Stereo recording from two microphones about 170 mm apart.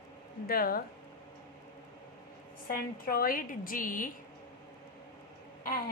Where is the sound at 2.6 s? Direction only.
60° left (ahead or behind).